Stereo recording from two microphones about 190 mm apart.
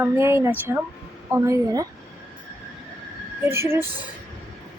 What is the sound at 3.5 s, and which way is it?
Speech, 10° right (ahead or behind).